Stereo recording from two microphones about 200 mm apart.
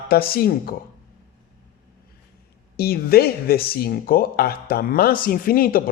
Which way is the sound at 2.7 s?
50° left (ahead or behind).